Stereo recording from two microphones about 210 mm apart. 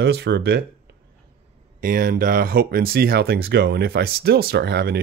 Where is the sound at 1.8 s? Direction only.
45° right (ahead or behind).